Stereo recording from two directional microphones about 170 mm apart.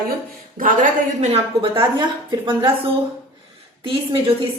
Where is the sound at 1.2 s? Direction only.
40° right (ahead or behind).